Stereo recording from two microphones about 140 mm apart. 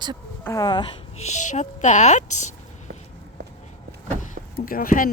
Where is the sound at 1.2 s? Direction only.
60° left (ahead or behind).